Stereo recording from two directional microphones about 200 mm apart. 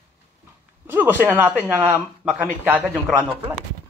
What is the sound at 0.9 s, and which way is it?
Speech, 10° right (ahead or behind).